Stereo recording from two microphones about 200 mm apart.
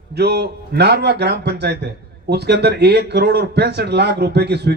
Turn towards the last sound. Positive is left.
turn(degrees=-55)  # may be behind; listen again after turning